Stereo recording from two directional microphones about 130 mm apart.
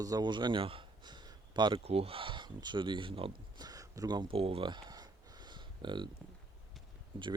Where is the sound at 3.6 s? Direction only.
25° right (ahead or behind).